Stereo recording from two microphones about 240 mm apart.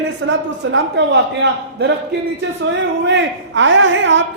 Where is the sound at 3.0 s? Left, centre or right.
Right.